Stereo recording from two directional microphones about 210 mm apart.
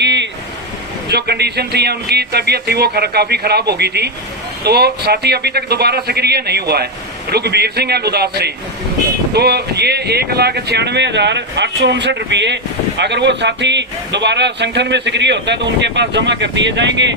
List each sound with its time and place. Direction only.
0.0 s vehicle: 55° right (ahead or behind)
1.0 s speech: 50° right (ahead or behind)